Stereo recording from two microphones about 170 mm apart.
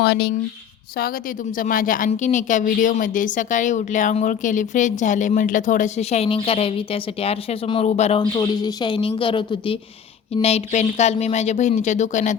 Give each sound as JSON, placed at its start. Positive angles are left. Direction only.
{"t": 0.0, "sound": "speech", "side_deg": 85}
{"t": 1.5, "sound": "speech", "side_deg": 55}
{"t": 8.2, "sound": "speech", "side_deg": 25}
{"t": 10.4, "sound": "speech", "side_deg": 40}